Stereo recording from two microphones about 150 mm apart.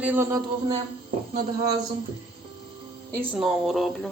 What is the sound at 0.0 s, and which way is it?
Speech, 15° right (ahead or behind).